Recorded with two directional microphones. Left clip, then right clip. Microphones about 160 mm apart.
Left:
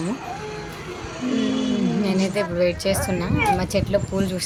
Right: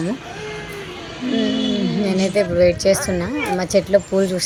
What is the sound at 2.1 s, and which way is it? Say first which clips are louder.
Speech: right 8 dB; 15° right (ahead or behind).